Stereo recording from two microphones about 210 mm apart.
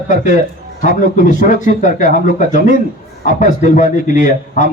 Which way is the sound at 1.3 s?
35° left (ahead or behind).